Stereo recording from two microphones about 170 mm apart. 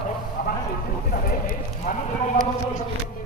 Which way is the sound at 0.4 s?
55° left (ahead or behind).